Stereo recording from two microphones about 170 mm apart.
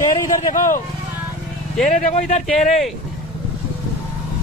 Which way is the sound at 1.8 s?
45° left (ahead or behind).